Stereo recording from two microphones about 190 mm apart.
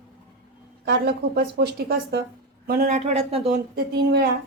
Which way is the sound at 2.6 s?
45° right (ahead or behind).